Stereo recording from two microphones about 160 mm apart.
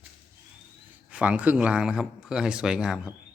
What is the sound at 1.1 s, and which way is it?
Speech, 10° right (ahead or behind).